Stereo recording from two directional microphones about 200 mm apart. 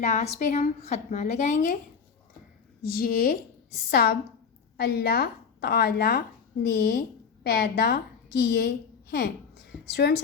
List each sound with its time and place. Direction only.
0.0 s a woman's voice: 35° left (ahead or behind)
2.8 s a woman's voice: 45° left (ahead or behind)